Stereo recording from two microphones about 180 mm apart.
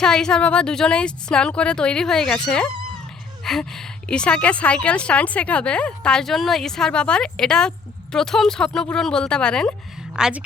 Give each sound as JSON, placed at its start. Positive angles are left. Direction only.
{"t": 0.0, "sound": "a woman's voice", "side_deg": 5}